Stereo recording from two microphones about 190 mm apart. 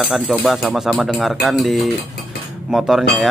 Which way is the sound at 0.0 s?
Centre (ahead or behind).